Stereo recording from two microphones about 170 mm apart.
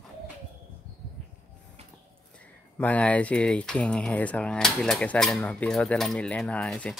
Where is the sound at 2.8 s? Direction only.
10° left (ahead or behind).